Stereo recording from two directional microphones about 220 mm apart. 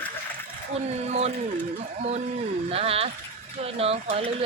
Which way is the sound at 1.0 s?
30° right (ahead or behind).